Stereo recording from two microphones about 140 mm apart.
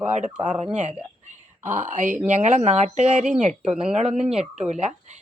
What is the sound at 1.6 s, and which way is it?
Speech, 15° right (ahead or behind).